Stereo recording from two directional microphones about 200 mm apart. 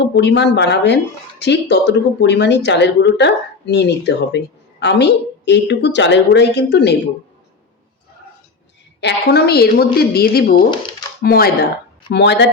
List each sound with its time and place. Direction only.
0.1 s speech: 60° left (ahead or behind)
9.0 s a woman's voice: 60° left (ahead or behind)
10.6 s speech: 25° left (ahead or behind)
11.2 s a woman's voice: 50° left (ahead or behind)